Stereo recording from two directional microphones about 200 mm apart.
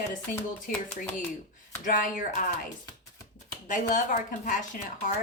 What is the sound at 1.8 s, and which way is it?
Speech, 40° left (ahead or behind).